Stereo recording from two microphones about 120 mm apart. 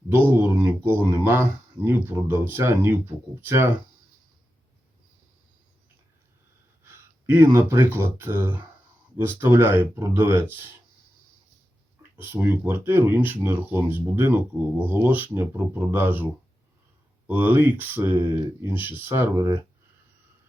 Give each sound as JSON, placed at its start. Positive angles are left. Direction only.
{"t": 0.1, "sound": "speech", "side_deg": -20}
{"t": 6.8, "sound": "a sound", "side_deg": -20}
{"t": 7.7, "sound": "speech", "side_deg": -20}
{"t": 12.1, "sound": "speech", "side_deg": -15}